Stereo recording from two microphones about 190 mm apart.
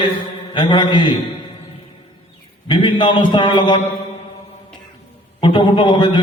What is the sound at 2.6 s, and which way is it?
A man's voice, 25° left (ahead or behind).